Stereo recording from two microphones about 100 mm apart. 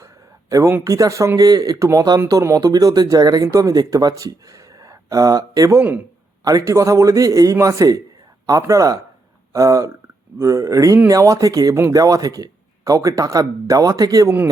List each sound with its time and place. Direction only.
0.5 s speech: 30° right (ahead or behind)